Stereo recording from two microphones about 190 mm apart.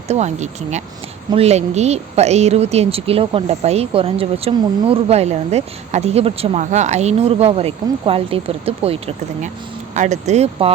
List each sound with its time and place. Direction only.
0.1 s speech: 35° right (ahead or behind)